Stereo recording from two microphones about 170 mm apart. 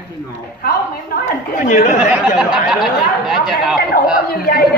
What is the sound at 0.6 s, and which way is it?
A woman's voice, 55° left (ahead or behind).